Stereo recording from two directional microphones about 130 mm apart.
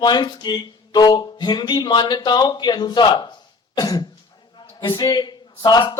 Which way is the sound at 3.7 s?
30° left (ahead or behind).